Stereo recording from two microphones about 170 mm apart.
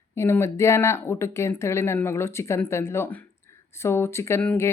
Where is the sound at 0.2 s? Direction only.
15° left (ahead or behind).